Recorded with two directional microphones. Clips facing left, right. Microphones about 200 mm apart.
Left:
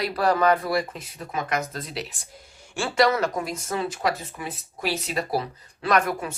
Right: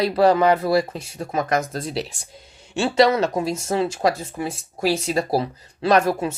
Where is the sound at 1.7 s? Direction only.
30° right (ahead or behind).